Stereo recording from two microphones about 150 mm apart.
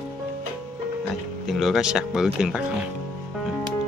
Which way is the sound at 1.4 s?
Centre (ahead or behind).